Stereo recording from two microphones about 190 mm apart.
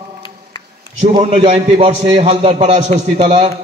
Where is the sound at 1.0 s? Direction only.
35° right (ahead or behind).